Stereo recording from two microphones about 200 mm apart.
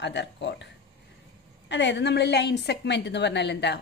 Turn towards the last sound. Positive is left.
turn(degrees=60)  # may be behind; listen again after turning